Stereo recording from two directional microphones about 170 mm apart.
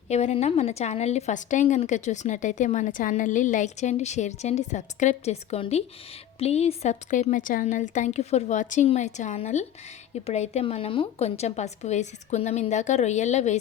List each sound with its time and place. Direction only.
0.1 s a woman's voice: 40° left (ahead or behind)